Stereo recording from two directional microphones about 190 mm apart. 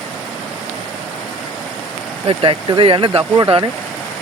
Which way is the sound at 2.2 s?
25° right (ahead or behind).